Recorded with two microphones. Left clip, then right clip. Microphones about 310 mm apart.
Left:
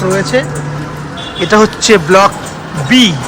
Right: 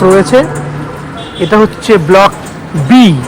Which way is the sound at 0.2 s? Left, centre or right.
Centre.